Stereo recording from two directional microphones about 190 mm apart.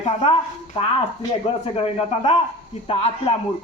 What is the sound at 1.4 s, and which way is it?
A man's voice, 30° left (ahead or behind).